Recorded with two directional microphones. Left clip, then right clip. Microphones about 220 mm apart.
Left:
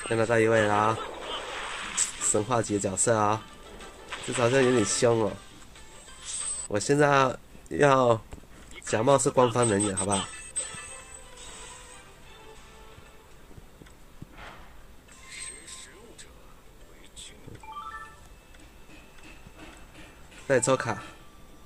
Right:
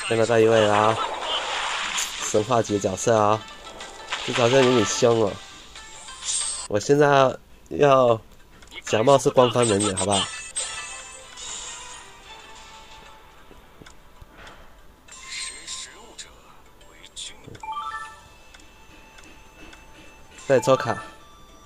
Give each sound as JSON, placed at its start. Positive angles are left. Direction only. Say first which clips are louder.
{"t": 0.2, "sound": "speech", "louder": "right 5 dB", "side_deg": -15}
{"t": 0.5, "sound": "a sound", "louder": "right 5 dB", "side_deg": 0}
{"t": 2.5, "sound": "speech", "louder": "right 5 dB", "side_deg": -15}
{"t": 3.3, "sound": "music", "louder": "right 6 dB", "side_deg": 0}
{"t": 4.9, "sound": "speech", "louder": "right 5 dB", "side_deg": -15}
{"t": 6.0, "sound": "music", "louder": "right 9 dB", "side_deg": 0}
{"t": 6.7, "sound": "speech", "louder": "right 5 dB", "side_deg": -15}
{"t": 8.7, "sound": "a sound", "louder": "right 6 dB", "side_deg": 0}
{"t": 9.0, "sound": "speech", "louder": "right 5 dB", "side_deg": -15}
{"t": 9.3, "sound": "music", "louder": "right 5 dB", "side_deg": 0}
{"t": 15.1, "sound": "music", "louder": "right 9 dB", "side_deg": 0}
{"t": 20.4, "sound": "speech", "louder": "right 5 dB", "side_deg": -15}